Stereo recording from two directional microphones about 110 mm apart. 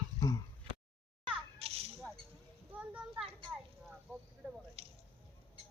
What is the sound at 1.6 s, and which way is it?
Children playing, 65° right (ahead or behind).